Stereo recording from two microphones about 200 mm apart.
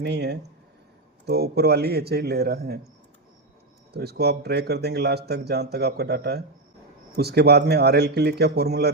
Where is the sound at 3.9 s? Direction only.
55° right (ahead or behind).